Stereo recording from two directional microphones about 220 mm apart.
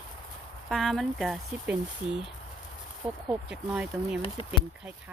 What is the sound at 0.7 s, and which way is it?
Speech, centre (ahead or behind).